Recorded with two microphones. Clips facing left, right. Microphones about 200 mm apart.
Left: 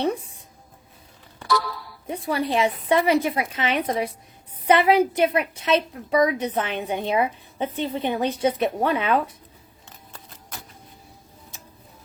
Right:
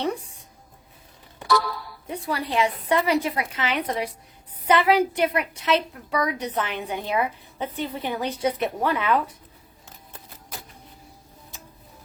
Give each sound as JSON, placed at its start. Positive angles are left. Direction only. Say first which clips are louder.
{"t": 0.0, "sound": "speech", "louder": "left 3 dB", "side_deg": 25}
{"t": 2.0, "sound": "a woman's voice", "louder": "left 4 dB", "side_deg": 25}